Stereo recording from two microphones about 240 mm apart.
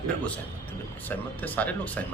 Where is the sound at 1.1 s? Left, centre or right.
Centre.